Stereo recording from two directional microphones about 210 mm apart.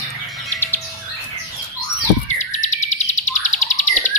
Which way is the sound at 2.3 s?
35° left (ahead or behind).